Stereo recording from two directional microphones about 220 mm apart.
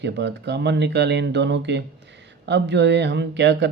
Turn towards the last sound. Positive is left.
turn(degrees=-50)  # may be behind; listen again after turning